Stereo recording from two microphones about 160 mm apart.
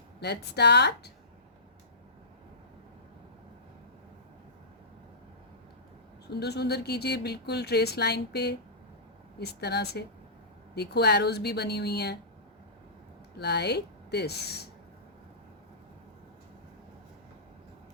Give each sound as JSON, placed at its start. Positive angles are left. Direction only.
{"t": 0.2, "sound": "speech", "side_deg": 90}
{"t": 6.2, "sound": "speech", "side_deg": 90}
{"t": 13.4, "sound": "speech", "side_deg": 90}